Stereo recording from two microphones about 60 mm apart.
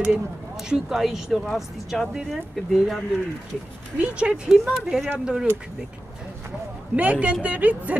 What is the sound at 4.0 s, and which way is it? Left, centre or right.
Speech, centre.